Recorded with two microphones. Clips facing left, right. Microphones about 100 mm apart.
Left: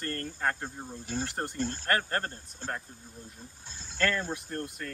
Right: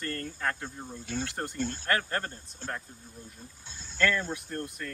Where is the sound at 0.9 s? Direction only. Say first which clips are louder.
Even; 35° left (ahead or behind).